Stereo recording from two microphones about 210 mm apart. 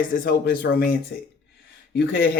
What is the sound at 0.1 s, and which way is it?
Speech, 40° left (ahead or behind).